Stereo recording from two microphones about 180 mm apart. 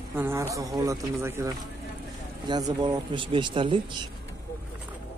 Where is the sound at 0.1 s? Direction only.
15° right (ahead or behind).